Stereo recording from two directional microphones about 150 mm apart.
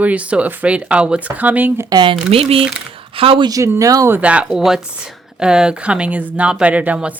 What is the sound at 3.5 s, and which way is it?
A woman's voice, 20° right (ahead or behind).